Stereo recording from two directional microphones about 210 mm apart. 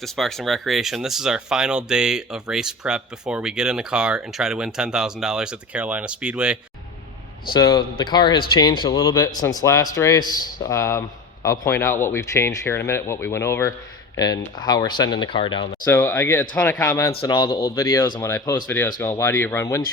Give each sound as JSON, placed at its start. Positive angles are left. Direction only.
{"t": 0.0, "sound": "speech", "side_deg": 0}
{"t": 7.5, "sound": "speech", "side_deg": 15}
{"t": 15.9, "sound": "speech", "side_deg": 10}